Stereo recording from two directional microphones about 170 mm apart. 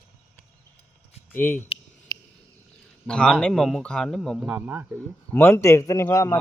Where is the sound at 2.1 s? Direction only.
25° left (ahead or behind).